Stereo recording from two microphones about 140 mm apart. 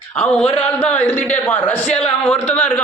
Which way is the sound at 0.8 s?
10° left (ahead or behind).